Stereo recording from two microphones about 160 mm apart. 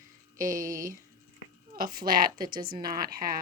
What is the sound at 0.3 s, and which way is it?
Speech, 55° right (ahead or behind).